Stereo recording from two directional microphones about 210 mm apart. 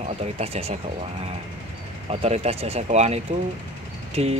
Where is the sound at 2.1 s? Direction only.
30° right (ahead or behind).